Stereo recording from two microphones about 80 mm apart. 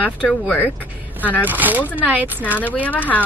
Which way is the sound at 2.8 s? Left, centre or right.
Centre.